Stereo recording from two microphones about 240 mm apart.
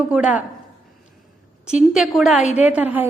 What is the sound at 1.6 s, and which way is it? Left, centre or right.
A woman's voice, centre.